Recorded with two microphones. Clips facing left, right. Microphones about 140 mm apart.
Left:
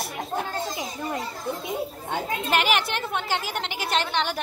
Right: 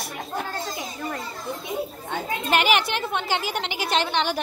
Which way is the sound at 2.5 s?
Centre (ahead or behind).